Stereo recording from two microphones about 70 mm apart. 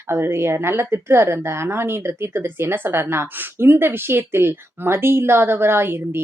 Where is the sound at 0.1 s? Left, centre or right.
Right.